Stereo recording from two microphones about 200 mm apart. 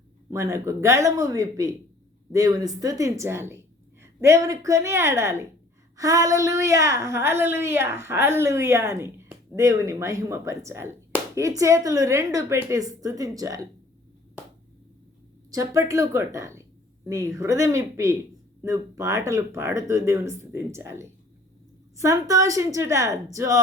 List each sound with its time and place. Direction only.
0.3 s a woman's voice: 15° right (ahead or behind)
15.4 s a woman's voice: 15° right (ahead or behind)